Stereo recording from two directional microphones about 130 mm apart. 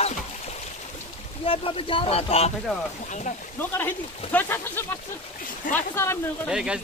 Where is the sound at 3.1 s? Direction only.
70° left (ahead or behind).